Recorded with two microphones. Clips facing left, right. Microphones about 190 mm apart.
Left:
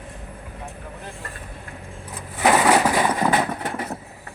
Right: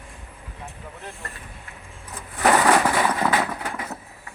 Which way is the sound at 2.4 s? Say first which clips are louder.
Left 1 dB; 10° left (ahead or behind).